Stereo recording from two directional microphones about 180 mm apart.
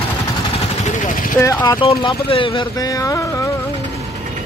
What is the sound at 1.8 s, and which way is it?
Speech, 30° left (ahead or behind).